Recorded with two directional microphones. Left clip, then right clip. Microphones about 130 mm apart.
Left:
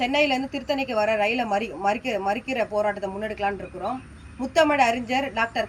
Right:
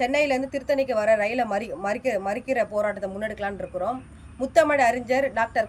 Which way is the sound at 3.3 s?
35° right (ahead or behind).